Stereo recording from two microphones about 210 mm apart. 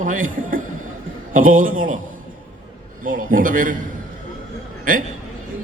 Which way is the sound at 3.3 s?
40° right (ahead or behind).